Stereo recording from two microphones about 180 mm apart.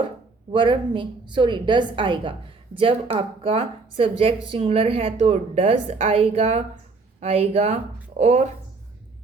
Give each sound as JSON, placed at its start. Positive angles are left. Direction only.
{"t": 0.5, "sound": "a woman's voice", "side_deg": -25}